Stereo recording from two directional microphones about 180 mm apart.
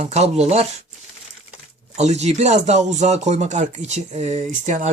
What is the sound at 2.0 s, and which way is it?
Speech, 40° right (ahead or behind).